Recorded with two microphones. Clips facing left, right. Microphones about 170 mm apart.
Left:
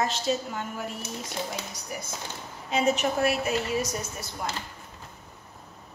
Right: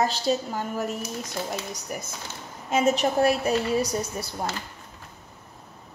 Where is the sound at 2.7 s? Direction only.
35° right (ahead or behind).